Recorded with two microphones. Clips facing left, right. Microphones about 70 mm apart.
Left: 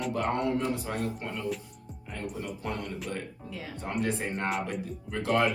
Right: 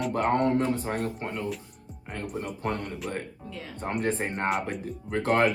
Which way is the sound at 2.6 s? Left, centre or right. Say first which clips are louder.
Right 5 dB; right.